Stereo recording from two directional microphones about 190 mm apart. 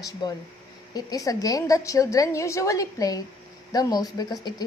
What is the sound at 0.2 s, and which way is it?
A woman's voice, 20° left (ahead or behind).